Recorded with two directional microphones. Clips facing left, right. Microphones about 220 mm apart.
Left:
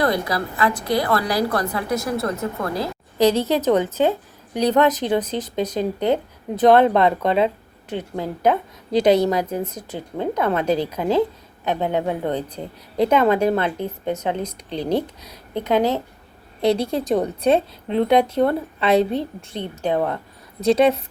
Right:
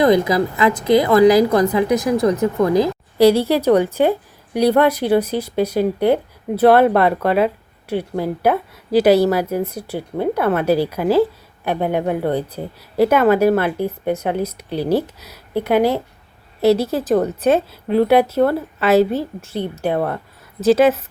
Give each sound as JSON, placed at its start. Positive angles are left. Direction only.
{"t": 0.3, "sound": "a woman's voice", "side_deg": -20}
{"t": 1.2, "sound": "a woman's voice", "side_deg": -90}
{"t": 1.6, "sound": "a woman's voice", "side_deg": -20}